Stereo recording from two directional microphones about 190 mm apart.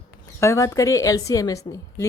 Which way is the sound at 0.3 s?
15° left (ahead or behind).